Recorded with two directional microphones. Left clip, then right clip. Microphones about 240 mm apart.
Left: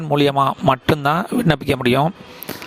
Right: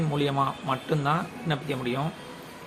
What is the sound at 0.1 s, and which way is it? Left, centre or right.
Speech, left.